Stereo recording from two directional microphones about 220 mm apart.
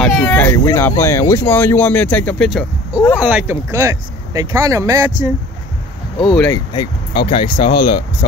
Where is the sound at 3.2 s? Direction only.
5° right (ahead or behind).